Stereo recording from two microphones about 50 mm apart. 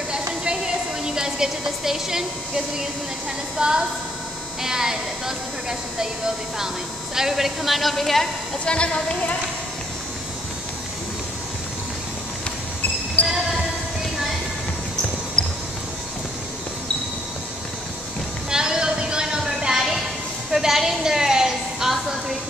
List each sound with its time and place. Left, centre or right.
1.0 s a woman's voice: centre
3.5 s a woman's voice: centre
8.6 s a woman's voice: left
15.4 s music: centre
18.5 s a sound: centre